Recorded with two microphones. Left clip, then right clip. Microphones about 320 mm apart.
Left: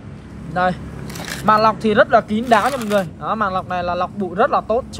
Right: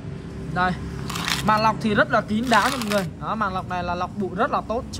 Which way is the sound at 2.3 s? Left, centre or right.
Left.